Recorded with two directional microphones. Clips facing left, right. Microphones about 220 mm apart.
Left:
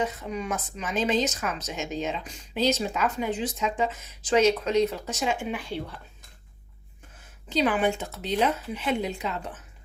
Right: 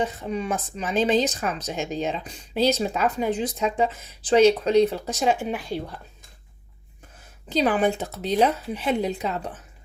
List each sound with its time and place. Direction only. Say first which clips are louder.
0.0 s speech: right 3 dB; 30° right (ahead or behind)
7.5 s speech: right 3 dB; 40° right (ahead or behind)